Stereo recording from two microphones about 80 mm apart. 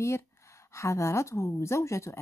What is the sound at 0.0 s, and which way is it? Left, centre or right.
A woman's voice, left.